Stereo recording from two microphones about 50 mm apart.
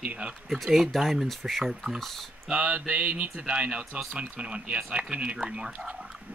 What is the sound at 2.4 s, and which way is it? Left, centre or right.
Speech, right.